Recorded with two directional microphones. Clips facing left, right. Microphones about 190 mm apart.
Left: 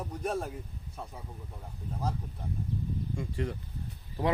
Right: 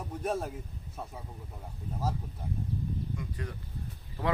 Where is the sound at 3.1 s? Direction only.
25° left (ahead or behind).